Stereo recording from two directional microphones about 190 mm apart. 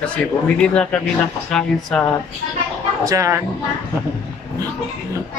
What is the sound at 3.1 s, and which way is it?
Speech, 15° right (ahead or behind).